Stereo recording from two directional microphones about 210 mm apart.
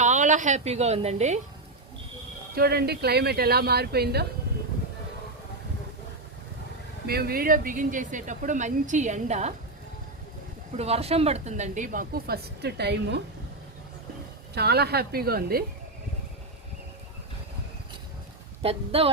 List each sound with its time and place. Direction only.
0.0 s a woman's voice: 35° right (ahead or behind)
2.6 s speech: 50° right (ahead or behind)
7.1 s speech: 45° right (ahead or behind)
10.8 s speech: 30° right (ahead or behind); by 13.2 s 55° right (ahead or behind)
14.5 s speech: 50° right (ahead or behind)
18.6 s speech: 30° right (ahead or behind)